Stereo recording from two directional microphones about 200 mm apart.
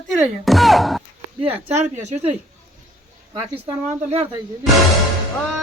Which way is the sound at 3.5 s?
10° right (ahead or behind).